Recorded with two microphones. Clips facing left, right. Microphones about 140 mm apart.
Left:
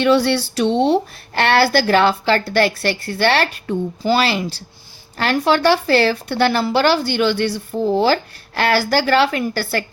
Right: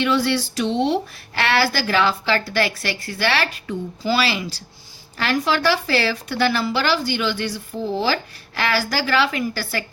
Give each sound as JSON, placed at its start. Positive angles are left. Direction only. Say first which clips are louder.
{"t": 0.0, "sound": "a woman's voice", "louder": "left 5 dB", "side_deg": 65}